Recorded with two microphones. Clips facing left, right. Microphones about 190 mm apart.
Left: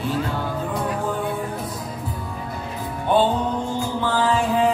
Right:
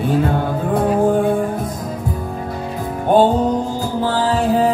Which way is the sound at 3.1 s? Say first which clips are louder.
Right 6 dB; 45° right (ahead or behind).